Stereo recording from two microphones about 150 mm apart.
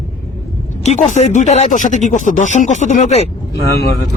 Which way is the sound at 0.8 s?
50° left (ahead or behind).